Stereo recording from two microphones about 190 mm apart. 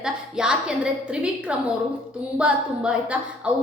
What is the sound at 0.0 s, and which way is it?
A woman's voice, 5° right (ahead or behind).